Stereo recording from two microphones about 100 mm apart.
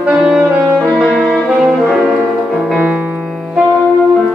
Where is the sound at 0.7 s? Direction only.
5° right (ahead or behind).